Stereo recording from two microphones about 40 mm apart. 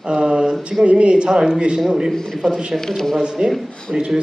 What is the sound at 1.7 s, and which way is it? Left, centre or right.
Speech, centre.